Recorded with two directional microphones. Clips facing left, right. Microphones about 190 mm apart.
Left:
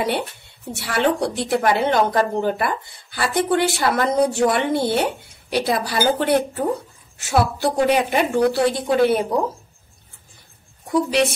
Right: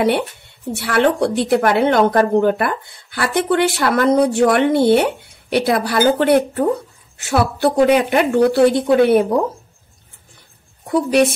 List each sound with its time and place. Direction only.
0.7 s a woman's voice: 60° right (ahead or behind)
10.9 s a woman's voice: 55° right (ahead or behind)